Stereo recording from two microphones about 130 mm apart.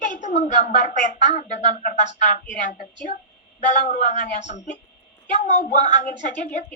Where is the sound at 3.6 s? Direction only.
75° left (ahead or behind).